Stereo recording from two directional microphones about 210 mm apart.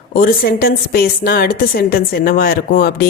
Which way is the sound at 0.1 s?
45° left (ahead or behind).